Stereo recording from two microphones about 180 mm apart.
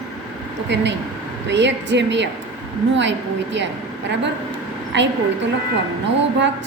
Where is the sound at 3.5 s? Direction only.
80° right.